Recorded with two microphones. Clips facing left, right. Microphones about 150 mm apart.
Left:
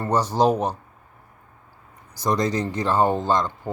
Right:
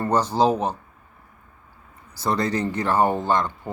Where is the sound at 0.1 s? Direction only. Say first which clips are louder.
Left 1 dB; 10° left (ahead or behind).